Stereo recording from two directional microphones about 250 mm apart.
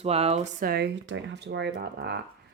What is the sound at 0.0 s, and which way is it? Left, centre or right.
Speech, right.